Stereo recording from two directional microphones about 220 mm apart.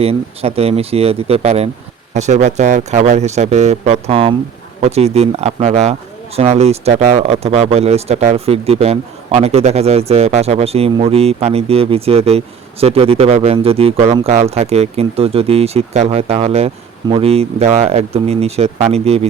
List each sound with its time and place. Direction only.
0.0 s speech: 25° right (ahead or behind)